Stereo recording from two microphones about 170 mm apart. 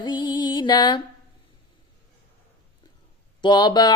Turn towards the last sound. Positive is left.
turn(degrees=25)  # may be behind; listen again after turning